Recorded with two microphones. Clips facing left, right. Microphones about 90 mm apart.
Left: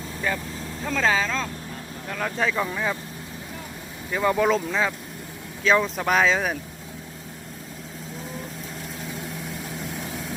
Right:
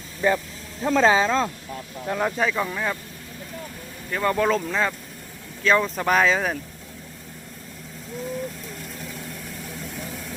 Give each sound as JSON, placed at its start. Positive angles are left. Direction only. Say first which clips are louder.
{"t": 0.2, "sound": "speech", "louder": "right 6 dB", "side_deg": -20}
{"t": 2.4, "sound": "speech", "louder": "right 1 dB", "side_deg": 0}
{"t": 4.1, "sound": "speech", "louder": "left 1 dB", "side_deg": 5}